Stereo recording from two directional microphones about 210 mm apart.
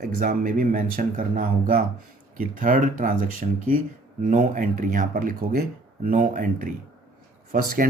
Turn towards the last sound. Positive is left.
turn(degrees=-40)  # may be behind; listen again after turning